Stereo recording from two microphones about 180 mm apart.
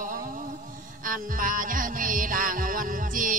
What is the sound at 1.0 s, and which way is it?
Music, 50° right (ahead or behind).